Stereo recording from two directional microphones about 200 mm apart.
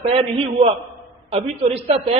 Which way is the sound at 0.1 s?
30° right (ahead or behind).